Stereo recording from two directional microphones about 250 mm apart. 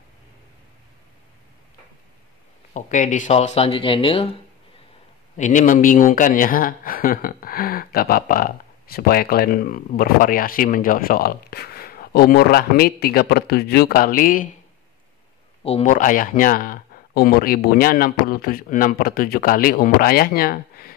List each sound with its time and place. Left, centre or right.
2.7 s speech: left
5.4 s speech: left
15.6 s speech: left